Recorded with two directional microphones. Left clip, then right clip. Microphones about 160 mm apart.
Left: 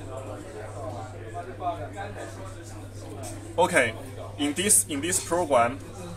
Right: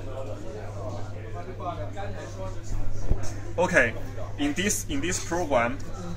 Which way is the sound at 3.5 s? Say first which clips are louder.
Even; 10° left (ahead or behind).